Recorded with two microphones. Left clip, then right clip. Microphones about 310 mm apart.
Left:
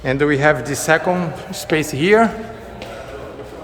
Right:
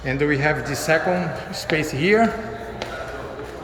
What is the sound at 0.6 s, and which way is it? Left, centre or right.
A man's voice, left.